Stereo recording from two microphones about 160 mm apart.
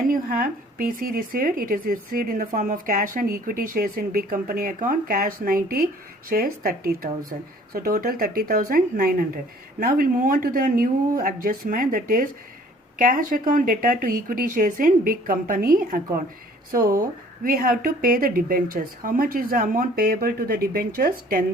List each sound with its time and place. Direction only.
0.1 s a woman's voice: 60° right (ahead or behind)